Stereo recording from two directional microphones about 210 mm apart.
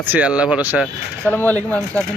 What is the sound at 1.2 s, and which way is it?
Speech, 10° left (ahead or behind).